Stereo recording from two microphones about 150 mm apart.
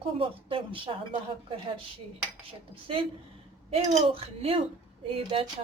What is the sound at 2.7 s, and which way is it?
Speech, 35° right (ahead or behind).